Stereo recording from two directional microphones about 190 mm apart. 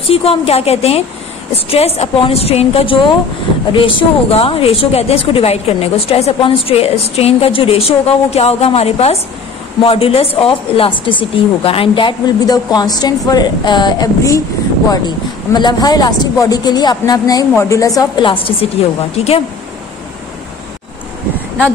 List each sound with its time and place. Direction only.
0.1 s a woman's voice: 30° left (ahead or behind)